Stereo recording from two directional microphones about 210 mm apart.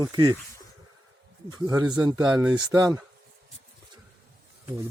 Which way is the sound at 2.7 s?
15° right (ahead or behind).